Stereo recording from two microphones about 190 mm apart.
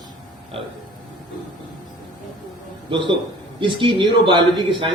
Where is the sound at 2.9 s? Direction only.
25° right (ahead or behind).